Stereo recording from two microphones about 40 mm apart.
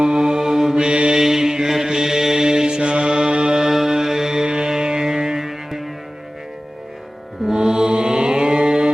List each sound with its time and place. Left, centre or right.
0.0 s mantra: centre
0.9 s mantra: right
1.2 s mantra: centre
3.7 s music: centre
7.4 s mantra: centre